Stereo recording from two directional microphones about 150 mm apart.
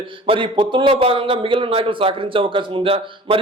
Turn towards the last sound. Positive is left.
turn(degrees=-35)  # may be behind; listen again after turning